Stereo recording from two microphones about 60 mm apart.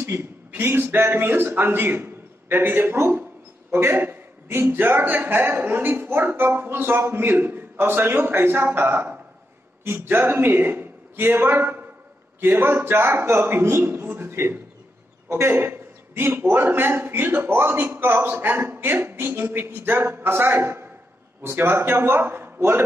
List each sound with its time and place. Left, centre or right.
0.0 s a man's voice: right
15.2 s a man's voice: right
15.5 s a man's voice: right